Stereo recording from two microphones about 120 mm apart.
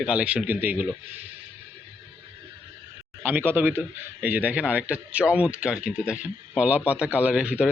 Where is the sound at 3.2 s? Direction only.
15° right (ahead or behind).